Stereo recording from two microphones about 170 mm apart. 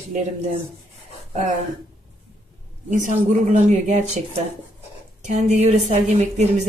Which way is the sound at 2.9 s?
45° right (ahead or behind).